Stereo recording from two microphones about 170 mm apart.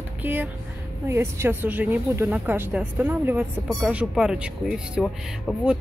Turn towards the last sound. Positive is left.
turn(degrees=0)  # may be behind; listen again after turning